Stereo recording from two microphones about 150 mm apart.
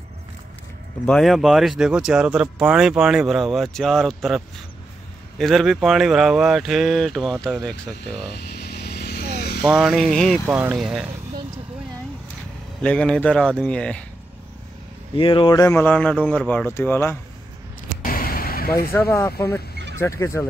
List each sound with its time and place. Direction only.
1.0 s speech: centre (ahead or behind)
5.4 s speech: centre (ahead or behind)
8.4 s vehicle: 90° left
9.7 s speech: centre (ahead or behind)
10.4 s speech: 10° right (ahead or behind)
12.8 s speech: 5° left (ahead or behind)
15.1 s speech: 35° left (ahead or behind)
15.7 s speech: 10° left (ahead or behind)
18.0 s a sound: 75° left (ahead or behind)
19.5 s speech: 20° left (ahead or behind)